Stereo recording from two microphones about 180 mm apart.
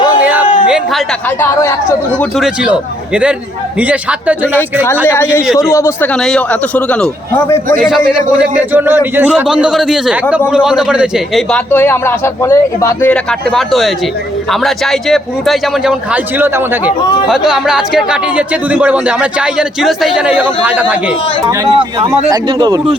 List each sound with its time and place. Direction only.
1.4 s a man's voice: 15° left (ahead or behind)
3.8 s a man's voice: 10° right (ahead or behind)
5.0 s a man's voice: 15° left (ahead or behind)
6.1 s a man's voice: 5° left (ahead or behind)
7.8 s speech: centre (ahead or behind)
11.5 s a man's voice: 10° left (ahead or behind); by 21.0 s 10° right (ahead or behind)
21.6 s speech: 25° right (ahead or behind)